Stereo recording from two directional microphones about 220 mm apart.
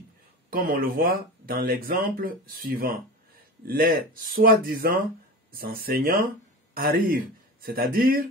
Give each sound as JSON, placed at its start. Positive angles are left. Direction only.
{"t": 0.5, "sound": "speech", "side_deg": -40}